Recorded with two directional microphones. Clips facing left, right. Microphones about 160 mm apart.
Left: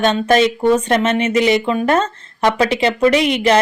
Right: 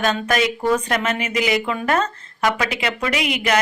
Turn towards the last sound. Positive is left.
turn(degrees=30)  # may be behind; listen again after turning